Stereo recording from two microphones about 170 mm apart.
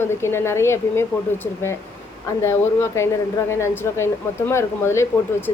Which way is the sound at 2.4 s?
15° left (ahead or behind).